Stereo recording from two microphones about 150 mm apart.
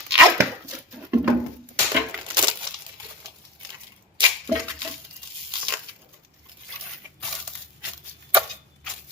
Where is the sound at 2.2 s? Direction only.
30° right (ahead or behind).